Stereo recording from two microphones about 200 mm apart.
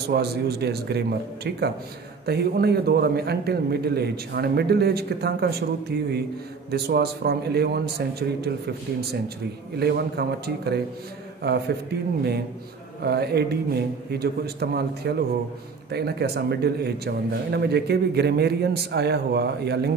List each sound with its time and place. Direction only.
0.1 s a man's voice: 55° right (ahead or behind)
13.0 s a man's voice: 55° right (ahead or behind)